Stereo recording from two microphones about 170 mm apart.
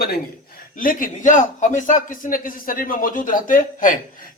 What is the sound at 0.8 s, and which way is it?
A man's voice, 55° left (ahead or behind).